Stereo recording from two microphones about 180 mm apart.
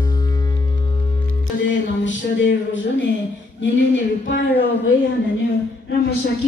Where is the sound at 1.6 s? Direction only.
90° left.